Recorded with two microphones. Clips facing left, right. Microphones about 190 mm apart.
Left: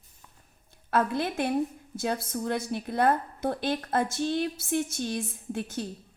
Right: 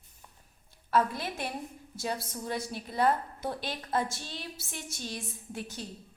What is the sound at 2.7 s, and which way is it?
A woman's voice, 55° left (ahead or behind).